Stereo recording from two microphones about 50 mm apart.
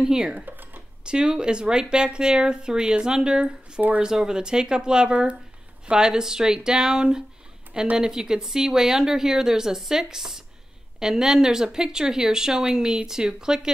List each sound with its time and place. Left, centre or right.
0.0 s speech: centre
0.5 s a sound: right
1.0 s speech: centre